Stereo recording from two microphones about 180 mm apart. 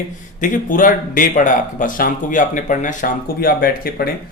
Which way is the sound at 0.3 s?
45° left (ahead or behind).